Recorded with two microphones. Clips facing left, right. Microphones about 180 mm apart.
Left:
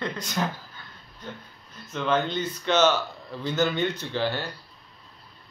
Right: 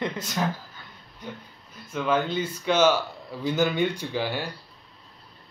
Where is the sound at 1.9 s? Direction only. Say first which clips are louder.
Right 1 dB; 10° right (ahead or behind).